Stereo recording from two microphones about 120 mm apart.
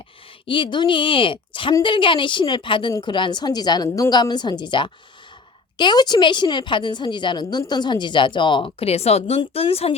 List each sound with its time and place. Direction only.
0.4 s a woman's voice: 45° left (ahead or behind)